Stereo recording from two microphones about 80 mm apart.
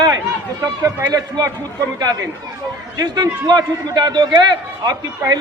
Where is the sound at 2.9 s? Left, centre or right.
Right.